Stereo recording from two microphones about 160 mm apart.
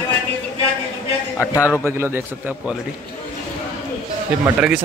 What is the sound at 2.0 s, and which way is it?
Speech, 10° right (ahead or behind).